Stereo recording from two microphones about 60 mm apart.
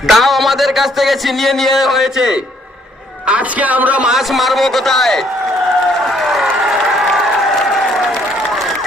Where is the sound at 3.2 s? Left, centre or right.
Right.